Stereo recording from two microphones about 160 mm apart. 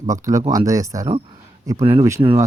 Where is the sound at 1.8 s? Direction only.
35° right (ahead or behind).